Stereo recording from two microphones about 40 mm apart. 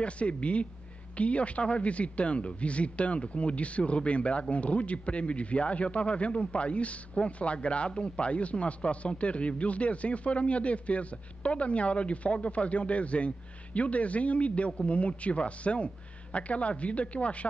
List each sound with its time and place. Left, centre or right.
0.0 s a man's voice: left